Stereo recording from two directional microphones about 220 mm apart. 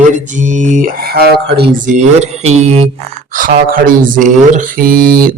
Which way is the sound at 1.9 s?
30° right (ahead or behind).